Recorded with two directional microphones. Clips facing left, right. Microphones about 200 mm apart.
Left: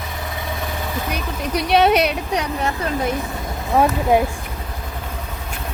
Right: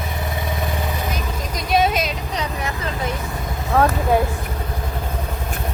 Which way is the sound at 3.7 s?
15° left (ahead or behind).